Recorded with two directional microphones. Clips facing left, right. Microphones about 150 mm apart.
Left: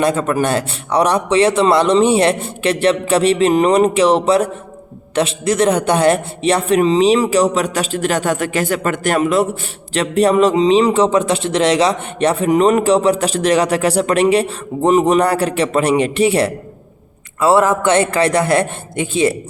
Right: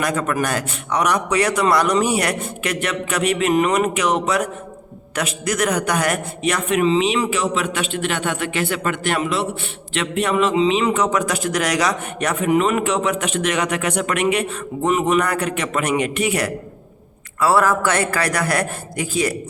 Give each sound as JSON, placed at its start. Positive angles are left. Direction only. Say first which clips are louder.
{"t": 0.0, "sound": "a man's voice", "louder": "left 5 dB", "side_deg": 30}